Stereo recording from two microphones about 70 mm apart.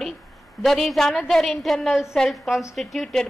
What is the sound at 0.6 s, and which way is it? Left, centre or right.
A woman's voice, centre.